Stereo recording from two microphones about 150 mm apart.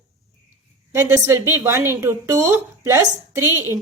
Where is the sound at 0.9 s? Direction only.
20° right (ahead or behind).